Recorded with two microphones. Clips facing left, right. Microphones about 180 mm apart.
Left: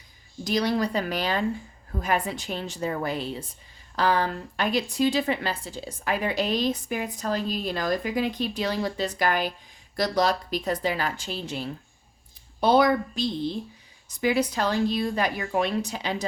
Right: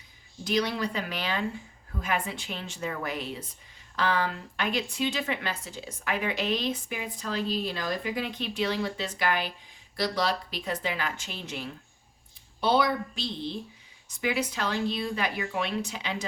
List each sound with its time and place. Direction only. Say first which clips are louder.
0.4 s speech: left 3 dB; 40° left (ahead or behind)
12.5 s speech: left 5 dB; 45° left (ahead or behind)